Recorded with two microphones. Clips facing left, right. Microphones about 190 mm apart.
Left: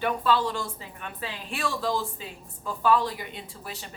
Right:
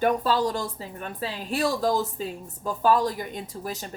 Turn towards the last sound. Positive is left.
turn(degrees=-40)  # may be behind; listen again after turning